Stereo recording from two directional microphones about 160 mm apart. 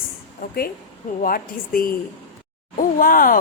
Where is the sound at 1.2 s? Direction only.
65° left (ahead or behind).